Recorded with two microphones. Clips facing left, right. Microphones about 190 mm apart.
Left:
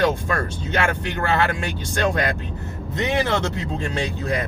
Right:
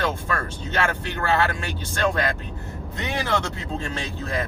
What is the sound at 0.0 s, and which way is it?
Speech, 15° left (ahead or behind).